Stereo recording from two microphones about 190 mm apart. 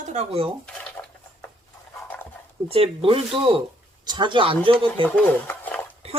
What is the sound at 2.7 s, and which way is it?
Speech, 30° right (ahead or behind).